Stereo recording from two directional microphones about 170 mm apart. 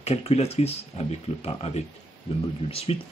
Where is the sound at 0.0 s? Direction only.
40° left (ahead or behind).